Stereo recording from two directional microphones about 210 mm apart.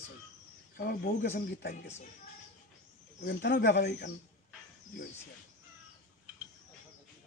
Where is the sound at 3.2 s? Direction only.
55° left (ahead or behind).